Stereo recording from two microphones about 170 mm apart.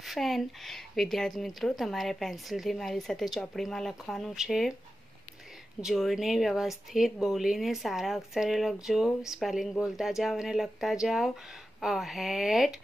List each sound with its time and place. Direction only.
0.0 s speech: centre (ahead or behind)
5.8 s speech: centre (ahead or behind)